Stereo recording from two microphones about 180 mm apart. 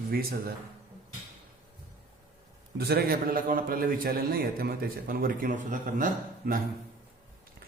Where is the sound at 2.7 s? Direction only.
60° right (ahead or behind).